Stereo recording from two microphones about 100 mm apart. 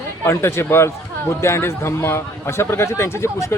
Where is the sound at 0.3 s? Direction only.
25° left (ahead or behind).